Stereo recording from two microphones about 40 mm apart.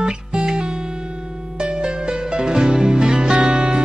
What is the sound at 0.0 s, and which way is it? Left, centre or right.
Music, centre.